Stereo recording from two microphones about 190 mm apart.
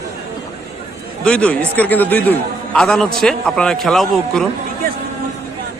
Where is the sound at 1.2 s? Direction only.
5° left (ahead or behind).